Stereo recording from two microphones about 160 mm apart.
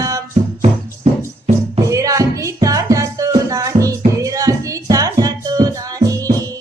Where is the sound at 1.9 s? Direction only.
20° right (ahead or behind).